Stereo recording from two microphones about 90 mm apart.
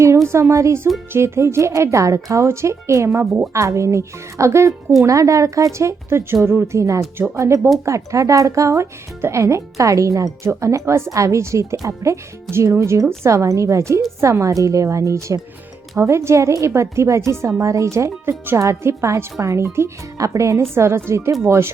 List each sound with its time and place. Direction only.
0.3 s speech: 30° right (ahead or behind)